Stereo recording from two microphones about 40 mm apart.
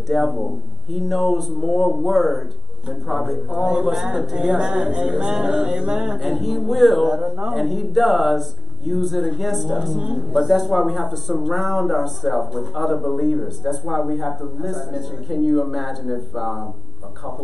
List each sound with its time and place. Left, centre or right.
0.1 s speech: centre; by 6.1 s right
6.2 s speech: centre